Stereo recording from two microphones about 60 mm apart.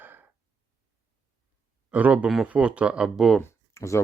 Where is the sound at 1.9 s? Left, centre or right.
Right.